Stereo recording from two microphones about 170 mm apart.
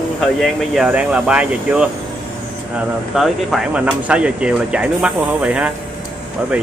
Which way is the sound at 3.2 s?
Centre (ahead or behind).